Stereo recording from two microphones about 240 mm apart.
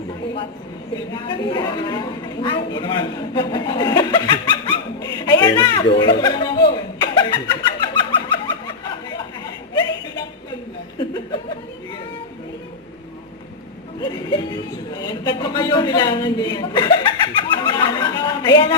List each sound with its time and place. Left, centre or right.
0.9 s a sound: centre
14.0 s speech: centre
17.5 s chatter: centre